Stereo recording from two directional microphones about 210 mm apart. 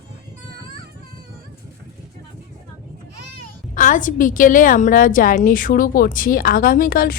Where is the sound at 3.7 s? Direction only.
40° left (ahead or behind).